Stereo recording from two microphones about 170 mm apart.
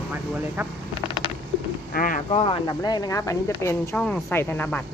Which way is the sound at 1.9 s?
55° left (ahead or behind).